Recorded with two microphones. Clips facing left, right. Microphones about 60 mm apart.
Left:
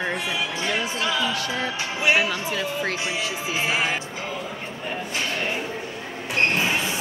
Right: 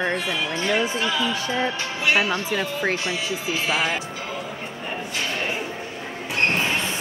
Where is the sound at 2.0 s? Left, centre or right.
Centre.